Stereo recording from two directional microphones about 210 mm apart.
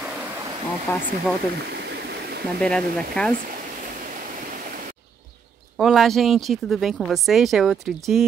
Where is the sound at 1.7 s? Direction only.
50° right (ahead or behind).